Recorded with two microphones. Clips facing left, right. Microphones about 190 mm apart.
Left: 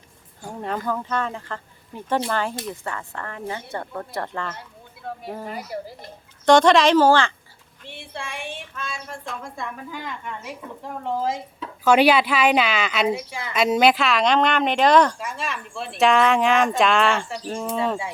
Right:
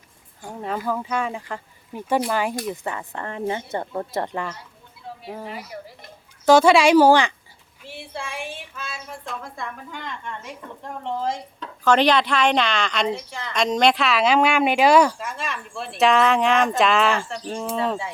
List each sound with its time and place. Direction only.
0.6 s speech: 5° right (ahead or behind)
5.0 s a sound: 60° left (ahead or behind)
5.5 s speech: 40° left (ahead or behind)
6.4 s speech: 5° right (ahead or behind)
7.9 s a woman's voice: centre (ahead or behind)